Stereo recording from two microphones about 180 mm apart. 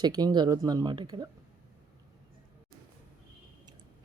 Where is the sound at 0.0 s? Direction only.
20° right (ahead or behind).